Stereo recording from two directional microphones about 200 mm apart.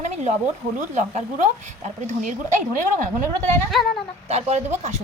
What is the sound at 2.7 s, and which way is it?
A woman's voice, 40° right (ahead or behind).